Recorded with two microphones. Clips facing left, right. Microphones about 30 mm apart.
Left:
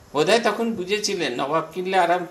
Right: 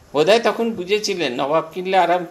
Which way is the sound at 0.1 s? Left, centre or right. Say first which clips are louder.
Right 4 dB; centre.